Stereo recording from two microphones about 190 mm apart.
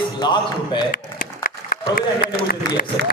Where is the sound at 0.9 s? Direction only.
50° left (ahead or behind).